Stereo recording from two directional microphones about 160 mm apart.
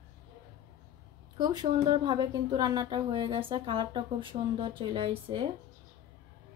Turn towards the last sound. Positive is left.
turn(degrees=-35)  # may be behind; listen again after turning